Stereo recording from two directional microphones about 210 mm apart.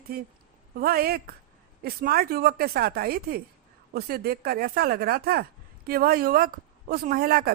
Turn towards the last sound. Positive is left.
turn(degrees=-45)  # may be behind; listen again after turning